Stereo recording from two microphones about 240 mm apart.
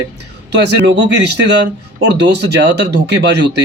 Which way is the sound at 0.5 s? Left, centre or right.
Right.